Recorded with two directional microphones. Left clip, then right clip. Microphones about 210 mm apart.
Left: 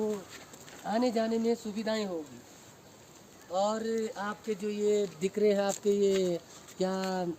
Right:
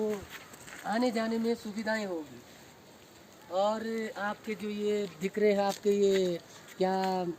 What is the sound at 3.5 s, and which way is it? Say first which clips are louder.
Speech: even; 45° left (ahead or behind).